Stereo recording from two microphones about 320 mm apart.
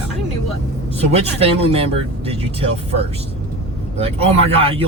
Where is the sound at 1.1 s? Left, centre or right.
Centre.